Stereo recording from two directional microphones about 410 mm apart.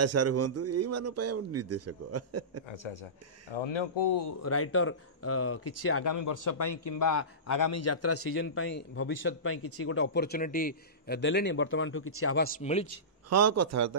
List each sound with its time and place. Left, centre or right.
0.0 s a man's voice: right
3.5 s speech: left
4.3 s a man's voice: left
6.0 s a man's voice: left
12.4 s a man's voice: centre
13.3 s a man's voice: right